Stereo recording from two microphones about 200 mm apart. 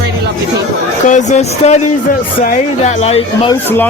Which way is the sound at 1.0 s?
35° left (ahead or behind).